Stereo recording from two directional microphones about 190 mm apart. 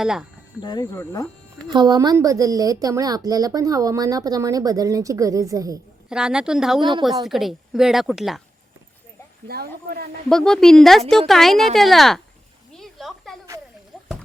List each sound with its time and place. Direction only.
0.0 s a woman's voice: 5° right (ahead or behind)
0.6 s speech: 20° left (ahead or behind)
1.6 s a woman's voice: 25° right (ahead or behind)
6.1 s a woman's voice: 5° right (ahead or behind)
9.5 s speech: 55° right (ahead or behind)
10.2 s a woman's voice: 5° left (ahead or behind)
12.7 s a sound: centre (ahead or behind)